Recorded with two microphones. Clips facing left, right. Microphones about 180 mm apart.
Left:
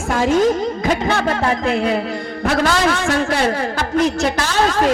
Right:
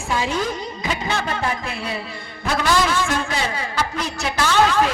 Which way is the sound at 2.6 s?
60° left (ahead or behind).